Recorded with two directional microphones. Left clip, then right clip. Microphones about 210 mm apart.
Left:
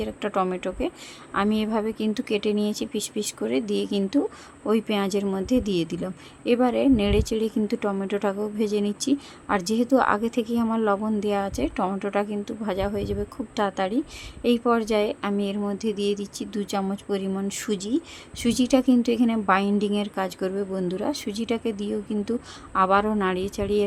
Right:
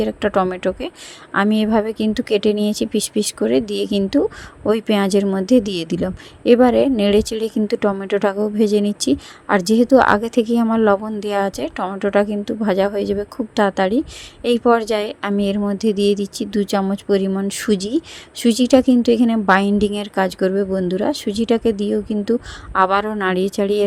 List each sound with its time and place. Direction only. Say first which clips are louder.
0.0 s a woman's voice: right 8 dB; 25° right (ahead or behind)